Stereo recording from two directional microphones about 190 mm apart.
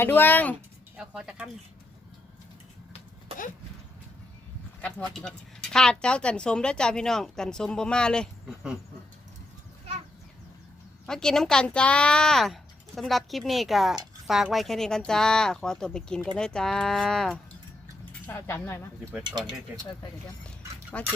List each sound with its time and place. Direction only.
0.0 s speech: 10° left (ahead or behind)
0.9 s speech: 5° right (ahead or behind)
4.8 s speech: 5° left (ahead or behind)
11.0 s speech: 5° left (ahead or behind)
19.2 s speech: 20° right (ahead or behind)
20.9 s speech: 10° left (ahead or behind)